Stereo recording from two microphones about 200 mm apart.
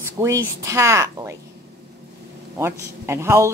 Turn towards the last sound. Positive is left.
turn(degrees=-15)  # may be behind; listen again after turning